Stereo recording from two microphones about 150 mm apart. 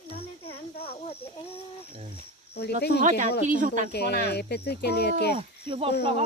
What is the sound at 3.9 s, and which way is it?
Speech, 90° left.